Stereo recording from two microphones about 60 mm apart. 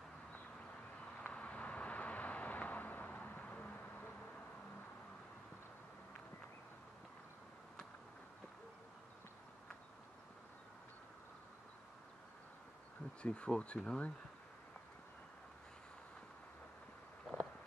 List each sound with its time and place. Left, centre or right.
1.2 s vehicle: left
13.2 s speech: centre